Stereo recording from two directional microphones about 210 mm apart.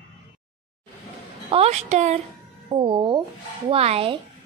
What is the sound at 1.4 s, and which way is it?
A woman's voice, 30° right (ahead or behind).